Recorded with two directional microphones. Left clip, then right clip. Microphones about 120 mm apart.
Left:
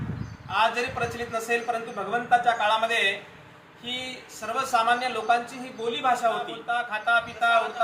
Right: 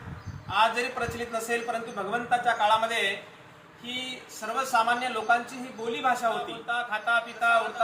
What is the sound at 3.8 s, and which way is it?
Speech, 40° left (ahead or behind).